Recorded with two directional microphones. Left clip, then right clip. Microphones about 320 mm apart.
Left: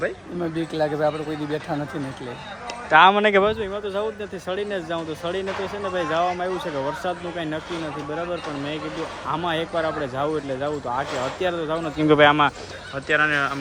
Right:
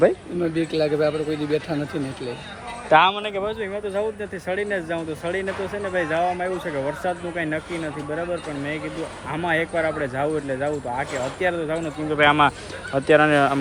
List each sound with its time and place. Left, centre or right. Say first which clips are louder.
0.5 s speech: right 2 dB; centre
2.9 s speech: left 3 dB; centre
3.6 s speech: right 1 dB; centre
9.3 s speech: right 2 dB; centre